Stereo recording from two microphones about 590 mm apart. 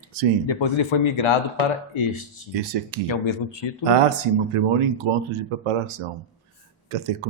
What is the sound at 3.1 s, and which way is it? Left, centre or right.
Speech, left.